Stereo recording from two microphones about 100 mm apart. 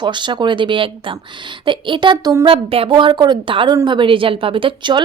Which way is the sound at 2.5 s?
70° right (ahead or behind).